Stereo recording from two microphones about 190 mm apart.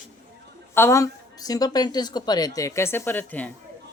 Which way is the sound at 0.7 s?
15° left (ahead or behind).